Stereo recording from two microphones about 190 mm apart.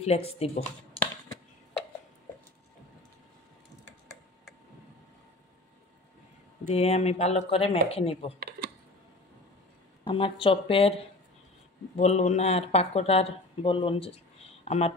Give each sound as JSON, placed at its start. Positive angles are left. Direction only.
{"t": 0.0, "sound": "speech", "side_deg": 30}
{"t": 6.7, "sound": "speech", "side_deg": 35}
{"t": 8.4, "sound": "computer keyboard", "side_deg": -60}
{"t": 10.0, "sound": "speech", "side_deg": 25}
{"t": 12.0, "sound": "speech", "side_deg": 35}